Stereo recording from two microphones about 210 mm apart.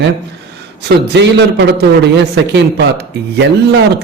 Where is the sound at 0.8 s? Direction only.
55° right (ahead or behind).